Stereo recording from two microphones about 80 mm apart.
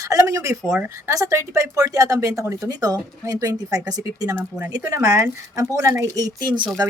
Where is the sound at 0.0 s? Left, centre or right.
Right.